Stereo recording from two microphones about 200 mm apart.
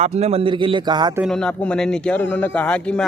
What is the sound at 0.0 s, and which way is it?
Speech, 30° right (ahead or behind).